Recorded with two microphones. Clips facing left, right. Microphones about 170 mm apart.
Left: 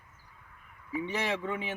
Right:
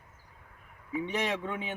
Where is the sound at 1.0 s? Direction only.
15° right (ahead or behind).